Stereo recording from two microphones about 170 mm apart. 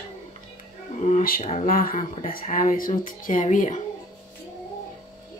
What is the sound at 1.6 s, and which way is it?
Speech, 60° left (ahead or behind).